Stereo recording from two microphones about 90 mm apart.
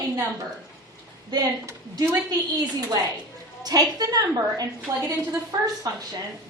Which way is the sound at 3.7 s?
45° right (ahead or behind).